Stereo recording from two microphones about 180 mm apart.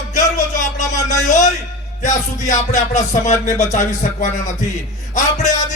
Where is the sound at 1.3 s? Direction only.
40° left (ahead or behind).